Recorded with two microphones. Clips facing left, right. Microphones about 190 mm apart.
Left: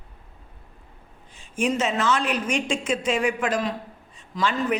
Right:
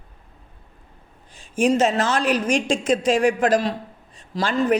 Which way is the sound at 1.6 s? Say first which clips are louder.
Right 5 dB; 40° right (ahead or behind).